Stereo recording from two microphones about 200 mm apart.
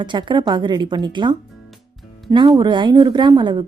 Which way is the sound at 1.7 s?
Centre (ahead or behind).